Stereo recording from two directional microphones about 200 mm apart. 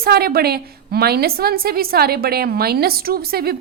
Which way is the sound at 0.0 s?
50° right (ahead or behind).